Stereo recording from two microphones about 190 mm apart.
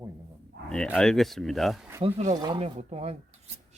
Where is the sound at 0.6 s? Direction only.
5° left (ahead or behind).